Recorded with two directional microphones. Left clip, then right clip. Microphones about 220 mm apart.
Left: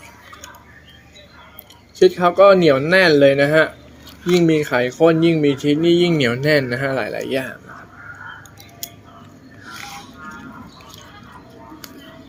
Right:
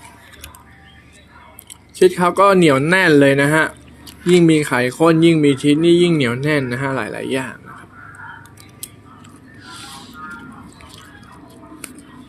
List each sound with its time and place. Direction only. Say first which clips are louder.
2.0 s speech: left 1 dB; 15° right (ahead or behind)